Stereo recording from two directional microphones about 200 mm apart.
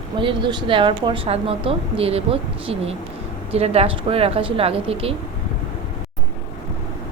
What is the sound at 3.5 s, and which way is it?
A woman's voice, 30° right (ahead or behind).